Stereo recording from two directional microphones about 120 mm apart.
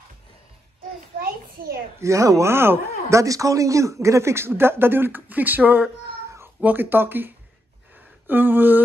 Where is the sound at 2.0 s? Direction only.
25° right (ahead or behind).